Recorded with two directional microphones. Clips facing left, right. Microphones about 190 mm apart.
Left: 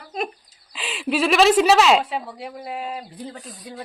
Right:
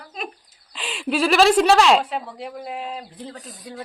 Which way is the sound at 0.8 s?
Centre (ahead or behind).